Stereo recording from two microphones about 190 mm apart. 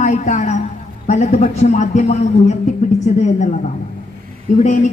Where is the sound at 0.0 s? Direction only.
40° left (ahead or behind).